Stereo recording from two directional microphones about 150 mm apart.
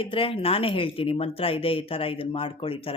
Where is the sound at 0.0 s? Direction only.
35° left (ahead or behind).